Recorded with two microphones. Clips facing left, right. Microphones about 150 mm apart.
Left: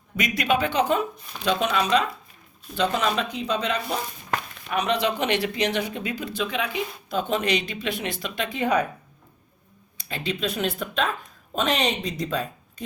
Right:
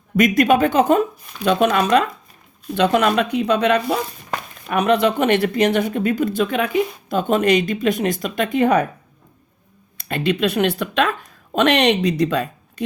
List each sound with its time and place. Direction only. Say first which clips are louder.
0.2 s speech: right 9 dB; 50° right (ahead or behind)
10.0 s a woman's voice: right 9 dB; 60° right (ahead or behind)